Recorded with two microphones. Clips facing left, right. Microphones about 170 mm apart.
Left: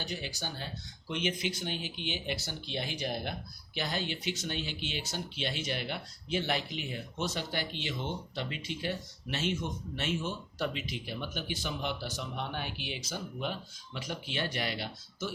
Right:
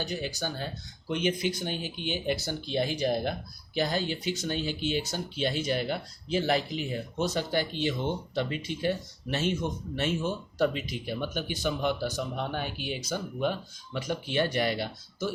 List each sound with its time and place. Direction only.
0.0 s speech: 45° right (ahead or behind)